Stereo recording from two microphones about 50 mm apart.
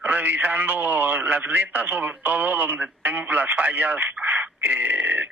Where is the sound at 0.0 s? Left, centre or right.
Right.